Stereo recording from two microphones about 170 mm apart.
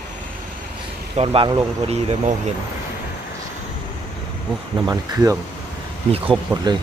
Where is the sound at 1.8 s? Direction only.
40° right (ahead or behind).